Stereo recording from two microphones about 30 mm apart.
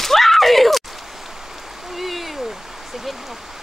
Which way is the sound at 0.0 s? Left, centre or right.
Centre.